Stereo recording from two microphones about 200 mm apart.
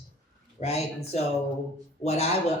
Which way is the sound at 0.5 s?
30° left (ahead or behind).